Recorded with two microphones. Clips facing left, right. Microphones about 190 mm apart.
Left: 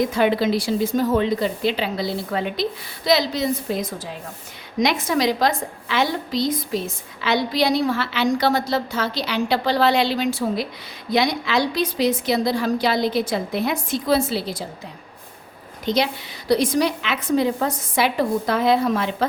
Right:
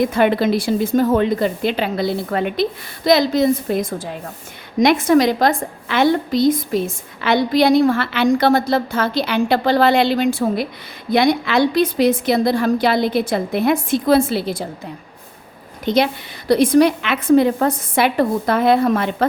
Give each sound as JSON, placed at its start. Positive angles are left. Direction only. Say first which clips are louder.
{"t": 0.0, "sound": "a woman's voice", "louder": "right 3 dB", "side_deg": -55}
{"t": 15.9, "sound": "a woman's voice", "louder": "right 4 dB", "side_deg": -55}